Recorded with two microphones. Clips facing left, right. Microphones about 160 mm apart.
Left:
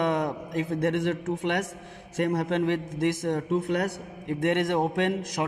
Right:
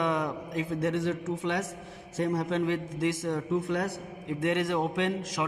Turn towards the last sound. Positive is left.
turn(degrees=45)  # may be behind; listen again after turning